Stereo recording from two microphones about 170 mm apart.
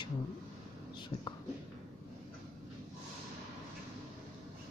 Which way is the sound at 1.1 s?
20° left (ahead or behind).